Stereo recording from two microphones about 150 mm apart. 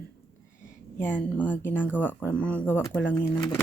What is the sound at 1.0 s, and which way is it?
Speech, 10° left (ahead or behind).